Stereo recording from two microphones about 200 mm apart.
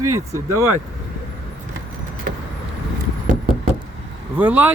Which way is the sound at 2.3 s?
45° right (ahead or behind).